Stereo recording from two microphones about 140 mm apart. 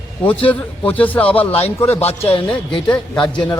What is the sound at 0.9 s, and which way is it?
A man's voice, 10° left (ahead or behind).